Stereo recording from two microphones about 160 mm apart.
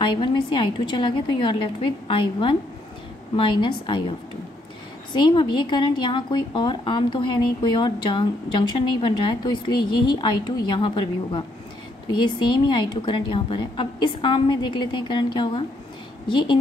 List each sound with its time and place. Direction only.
0.0 s a woman's voice: 30° left (ahead or behind)
5.1 s a woman's voice: 30° left (ahead or behind)